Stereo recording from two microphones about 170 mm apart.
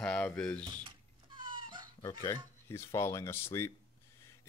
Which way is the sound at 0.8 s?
25° right (ahead or behind).